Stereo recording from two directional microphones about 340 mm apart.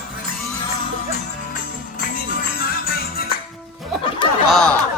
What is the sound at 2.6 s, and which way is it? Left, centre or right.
Music, left.